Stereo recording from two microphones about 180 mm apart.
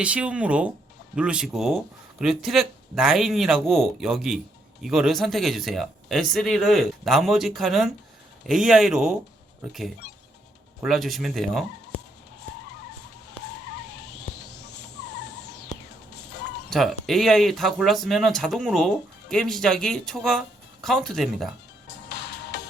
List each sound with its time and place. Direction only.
0.0 s speech: 5° right (ahead or behind)
15.7 s music: 40° left (ahead or behind)
16.6 s speech: centre (ahead or behind)